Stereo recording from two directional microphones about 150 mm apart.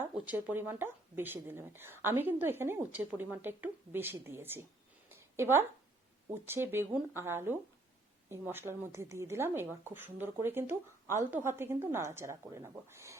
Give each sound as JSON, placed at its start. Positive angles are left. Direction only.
{"t": 0.0, "sound": "speech", "side_deg": -10}